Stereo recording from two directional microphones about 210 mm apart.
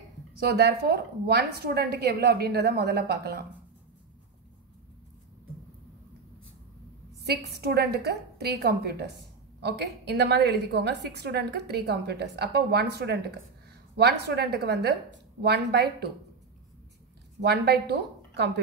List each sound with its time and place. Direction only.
0.4 s a woman's voice: 50° right (ahead or behind)
7.6 s a woman's voice: 50° right (ahead or behind)
17.4 s a woman's voice: 50° right (ahead or behind)